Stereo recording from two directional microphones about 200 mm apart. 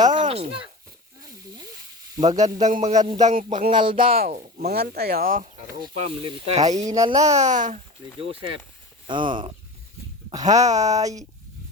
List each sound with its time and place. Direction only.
0.0 s speech: 20° right (ahead or behind)
2.6 s speech: 35° right (ahead or behind)
3.7 s speech: 25° right (ahead or behind)
4.1 s speech: 45° right (ahead or behind)
6.0 s speech: 25° right (ahead or behind)
6.8 s speech: 15° right (ahead or behind)
7.3 s speech: 40° right (ahead or behind)
8.2 s speech: 25° right (ahead or behind)